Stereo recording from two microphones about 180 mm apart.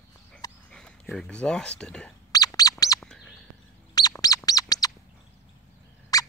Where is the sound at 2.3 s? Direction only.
20° left (ahead or behind).